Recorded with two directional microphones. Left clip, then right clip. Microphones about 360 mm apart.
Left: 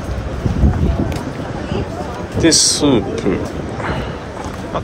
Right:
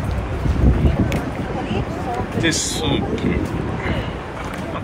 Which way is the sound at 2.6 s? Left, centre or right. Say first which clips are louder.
Left 7 dB; centre.